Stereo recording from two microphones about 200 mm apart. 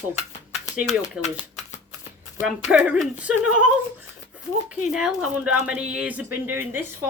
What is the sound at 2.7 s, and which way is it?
Speech, 5° right (ahead or behind).